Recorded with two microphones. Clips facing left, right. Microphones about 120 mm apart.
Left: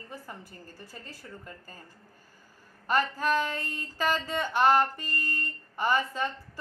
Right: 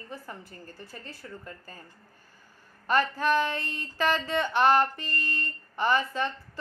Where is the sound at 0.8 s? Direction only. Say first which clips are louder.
Right 2 dB; 10° left (ahead or behind).